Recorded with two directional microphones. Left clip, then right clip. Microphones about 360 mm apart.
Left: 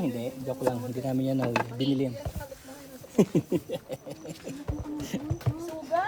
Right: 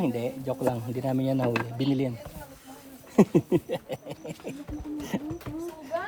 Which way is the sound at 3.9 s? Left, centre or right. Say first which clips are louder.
Right 2 dB; centre.